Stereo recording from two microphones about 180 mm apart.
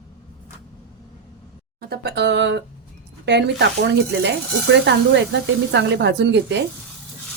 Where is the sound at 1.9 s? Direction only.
65° right (ahead or behind).